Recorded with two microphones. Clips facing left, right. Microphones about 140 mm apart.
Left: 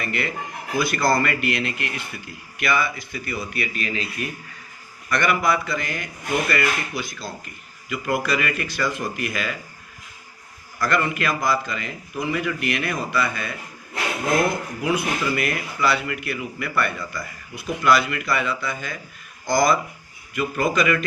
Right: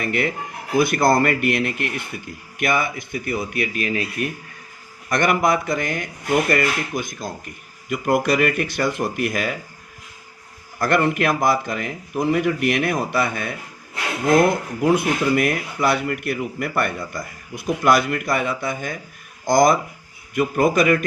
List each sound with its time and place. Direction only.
0.0 s a man's voice: 55° right (ahead or behind)
10.8 s a man's voice: 55° right (ahead or behind)